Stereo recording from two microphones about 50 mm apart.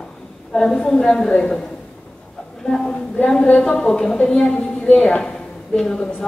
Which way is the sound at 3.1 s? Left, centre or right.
Left.